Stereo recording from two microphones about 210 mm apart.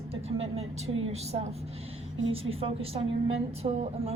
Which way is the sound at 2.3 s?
25° right (ahead or behind).